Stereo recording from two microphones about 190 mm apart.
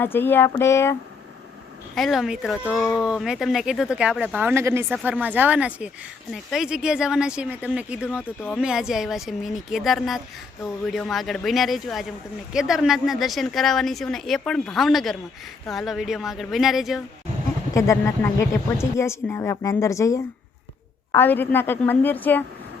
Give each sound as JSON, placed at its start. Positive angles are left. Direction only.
{"t": 0.0, "sound": "a woman's voice", "side_deg": 10}
{"t": 2.0, "sound": "speech", "side_deg": 0}
{"t": 17.7, "sound": "a woman's voice", "side_deg": 15}